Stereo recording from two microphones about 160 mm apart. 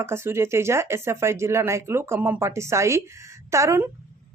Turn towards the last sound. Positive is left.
turn(degrees=-20)  # may be behind; listen again after turning